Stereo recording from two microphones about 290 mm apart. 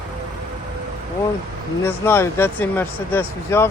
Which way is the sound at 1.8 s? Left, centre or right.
Centre.